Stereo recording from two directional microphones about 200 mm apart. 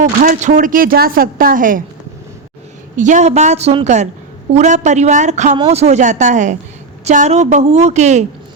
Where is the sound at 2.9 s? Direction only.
40° right (ahead or behind).